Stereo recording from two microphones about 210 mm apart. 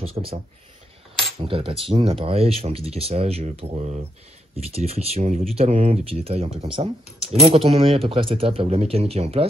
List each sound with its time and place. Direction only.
0.0 s speech: 25° right (ahead or behind)
1.4 s speech: 25° right (ahead or behind)